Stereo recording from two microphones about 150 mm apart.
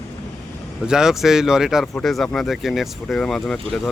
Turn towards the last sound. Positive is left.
turn(degrees=0)  # may be behind; listen again after turning